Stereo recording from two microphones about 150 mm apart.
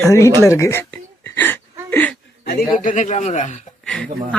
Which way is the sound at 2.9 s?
55° left (ahead or behind).